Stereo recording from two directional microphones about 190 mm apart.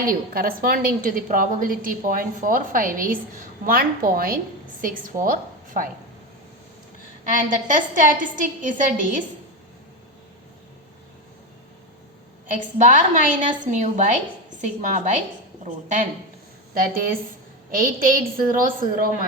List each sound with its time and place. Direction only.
0.1 s a woman's voice: 50° right (ahead or behind)
7.3 s a woman's voice: 45° right (ahead or behind)
12.5 s a woman's voice: 40° right (ahead or behind)